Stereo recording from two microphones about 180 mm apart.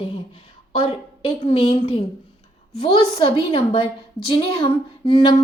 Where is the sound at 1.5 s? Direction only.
30° left (ahead or behind).